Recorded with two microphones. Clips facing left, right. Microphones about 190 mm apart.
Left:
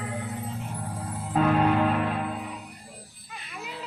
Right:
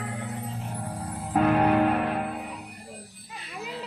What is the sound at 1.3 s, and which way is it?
Music, 50° right (ahead or behind).